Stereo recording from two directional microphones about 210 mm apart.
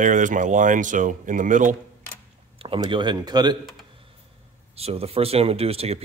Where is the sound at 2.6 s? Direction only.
25° right (ahead or behind).